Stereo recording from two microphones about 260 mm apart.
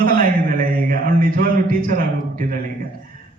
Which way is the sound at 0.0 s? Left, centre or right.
Right.